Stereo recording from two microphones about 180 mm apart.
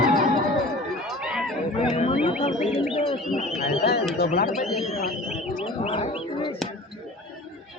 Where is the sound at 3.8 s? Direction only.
60° left (ahead or behind).